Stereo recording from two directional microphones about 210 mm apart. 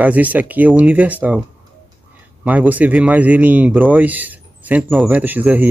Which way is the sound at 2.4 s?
5° right (ahead or behind).